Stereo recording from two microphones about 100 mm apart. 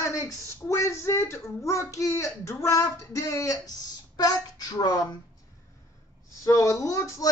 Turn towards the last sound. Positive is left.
turn(degrees=35)  # may be behind; listen again after turning